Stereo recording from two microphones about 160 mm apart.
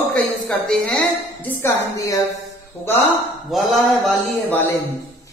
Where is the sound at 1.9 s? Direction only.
20° left (ahead or behind).